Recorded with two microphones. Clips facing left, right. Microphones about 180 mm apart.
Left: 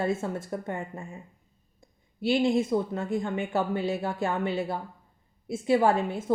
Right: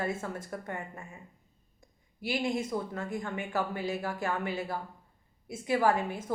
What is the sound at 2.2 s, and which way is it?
Speech, 25° left (ahead or behind).